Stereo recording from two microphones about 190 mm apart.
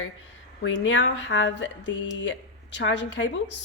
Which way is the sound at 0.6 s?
80° left.